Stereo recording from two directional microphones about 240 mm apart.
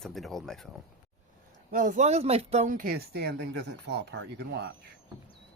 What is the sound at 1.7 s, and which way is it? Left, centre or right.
Speech, right.